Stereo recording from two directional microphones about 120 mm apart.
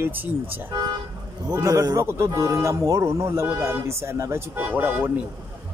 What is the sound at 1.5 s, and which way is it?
A man's voice, 25° right (ahead or behind).